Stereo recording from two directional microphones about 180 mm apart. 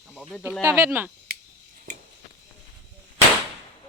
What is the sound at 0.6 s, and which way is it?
Speech, 15° right (ahead or behind).